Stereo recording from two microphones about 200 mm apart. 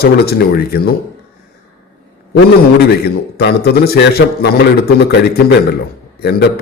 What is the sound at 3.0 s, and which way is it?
A man's voice, 55° left (ahead or behind).